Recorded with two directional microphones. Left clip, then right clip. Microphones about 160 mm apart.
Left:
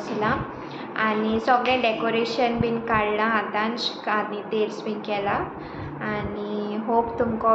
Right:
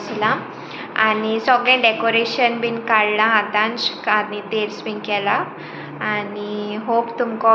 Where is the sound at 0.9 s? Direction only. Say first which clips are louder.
Right 6 dB; 5° left (ahead or behind).